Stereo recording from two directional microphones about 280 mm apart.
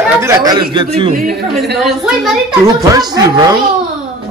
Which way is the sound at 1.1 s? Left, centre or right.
Right.